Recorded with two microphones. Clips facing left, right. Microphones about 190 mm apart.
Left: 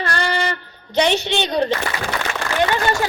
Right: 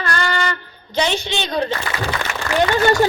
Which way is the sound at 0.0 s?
30° left (ahead or behind).